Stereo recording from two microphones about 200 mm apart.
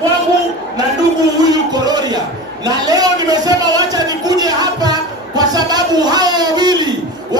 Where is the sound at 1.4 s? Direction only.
20° right (ahead or behind).